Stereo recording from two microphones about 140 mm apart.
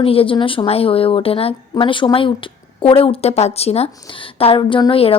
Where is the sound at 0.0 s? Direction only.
40° left (ahead or behind).